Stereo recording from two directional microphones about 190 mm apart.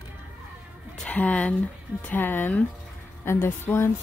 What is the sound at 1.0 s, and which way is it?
A woman's voice, 5° left (ahead or behind).